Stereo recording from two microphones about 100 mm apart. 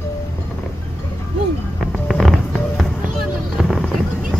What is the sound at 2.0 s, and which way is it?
Music, centre (ahead or behind).